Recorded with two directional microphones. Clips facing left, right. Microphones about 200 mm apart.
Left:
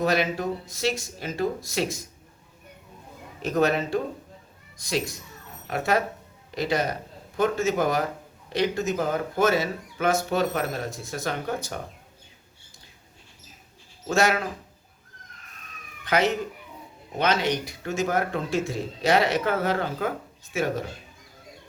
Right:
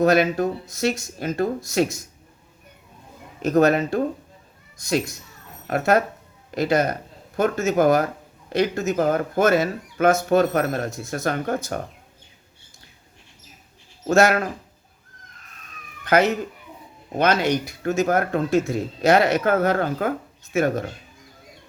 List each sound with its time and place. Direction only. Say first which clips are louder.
0.0 s speech: right 6 dB; 50° right (ahead or behind)
3.4 s speech: right 5 dB; 45° right (ahead or behind)
14.1 s speech: right 6 dB; 45° right (ahead or behind)
17.8 s speech: right 5 dB; 50° right (ahead or behind)